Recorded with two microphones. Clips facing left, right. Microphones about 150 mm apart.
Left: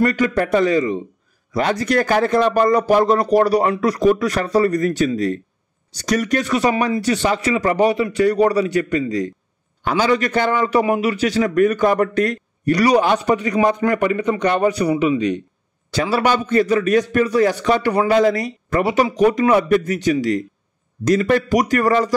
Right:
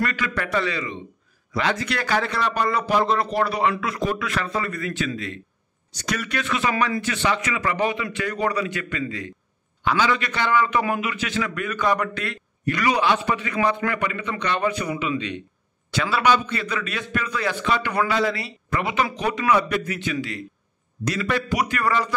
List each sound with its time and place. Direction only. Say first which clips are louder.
0.0 s a man's voice: left 9 dB; 45° left (ahead or behind)